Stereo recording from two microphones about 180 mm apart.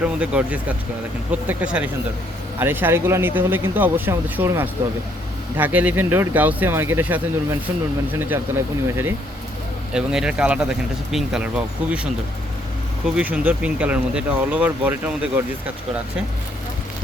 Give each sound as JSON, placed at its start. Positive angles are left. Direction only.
{"t": 0.0, "sound": "speech", "side_deg": -5}
{"t": 8.2, "sound": "speech", "side_deg": -10}
{"t": 13.1, "sound": "speech", "side_deg": -10}